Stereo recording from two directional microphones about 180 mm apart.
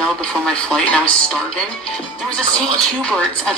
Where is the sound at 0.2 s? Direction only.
5° left (ahead or behind).